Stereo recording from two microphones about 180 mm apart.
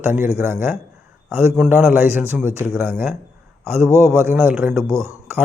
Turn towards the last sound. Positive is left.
turn(degrees=-15)  # may be behind; listen again after turning